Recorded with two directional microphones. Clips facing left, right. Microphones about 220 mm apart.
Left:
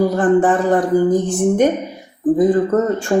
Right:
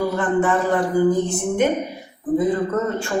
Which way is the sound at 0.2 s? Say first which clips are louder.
Left 5 dB; 45° left (ahead or behind).